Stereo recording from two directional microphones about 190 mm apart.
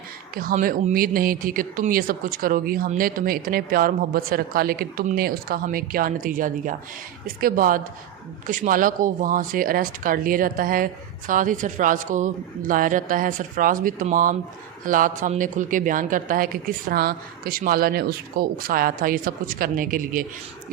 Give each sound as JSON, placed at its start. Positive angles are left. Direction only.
{"t": 0.3, "sound": "speech", "side_deg": -50}